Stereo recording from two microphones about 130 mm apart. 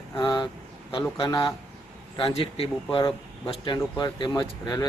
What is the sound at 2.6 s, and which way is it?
Speech, 40° left (ahead or behind).